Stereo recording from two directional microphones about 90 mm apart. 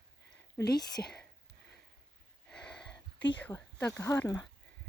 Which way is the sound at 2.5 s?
10° left (ahead or behind).